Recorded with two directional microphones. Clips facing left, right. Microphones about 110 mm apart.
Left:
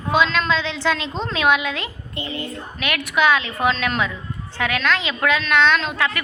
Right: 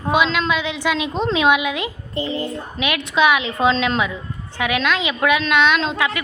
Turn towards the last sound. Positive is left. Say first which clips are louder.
# right 1 dB
turn(degrees=-15)  # may be behind; listen again after turning